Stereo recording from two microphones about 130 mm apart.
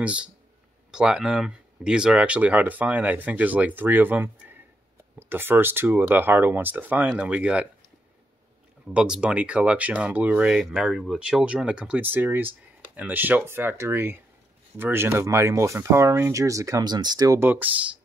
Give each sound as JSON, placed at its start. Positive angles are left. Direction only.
{"t": 0.0, "sound": "speech", "side_deg": -10}
{"t": 8.8, "sound": "speech", "side_deg": -5}
{"t": 17.4, "sound": "speech", "side_deg": -15}